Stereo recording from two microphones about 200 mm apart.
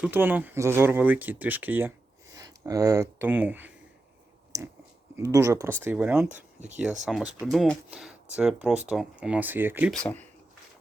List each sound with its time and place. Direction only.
0.0 s speech: 10° right (ahead or behind)
5.1 s speech: 15° right (ahead or behind)
9.9 s speech: 5° left (ahead or behind)